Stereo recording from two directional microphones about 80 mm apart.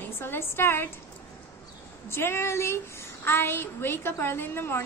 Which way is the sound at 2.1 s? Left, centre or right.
Left.